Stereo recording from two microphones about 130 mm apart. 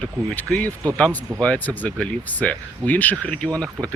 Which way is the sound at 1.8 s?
10° left (ahead or behind).